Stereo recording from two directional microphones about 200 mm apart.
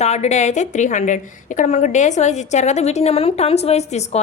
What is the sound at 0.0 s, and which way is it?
A woman's voice, 35° left (ahead or behind).